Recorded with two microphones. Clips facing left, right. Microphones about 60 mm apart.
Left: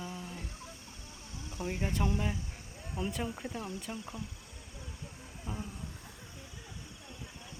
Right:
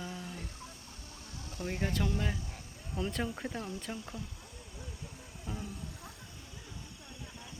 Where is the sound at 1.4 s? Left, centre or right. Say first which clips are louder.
Even; left.